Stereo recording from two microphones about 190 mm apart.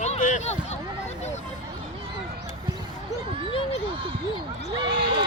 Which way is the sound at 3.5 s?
30° left (ahead or behind).